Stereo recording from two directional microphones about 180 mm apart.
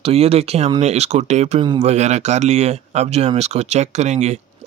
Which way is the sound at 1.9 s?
40° right (ahead or behind).